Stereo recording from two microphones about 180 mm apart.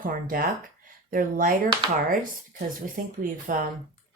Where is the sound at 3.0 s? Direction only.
50° right (ahead or behind).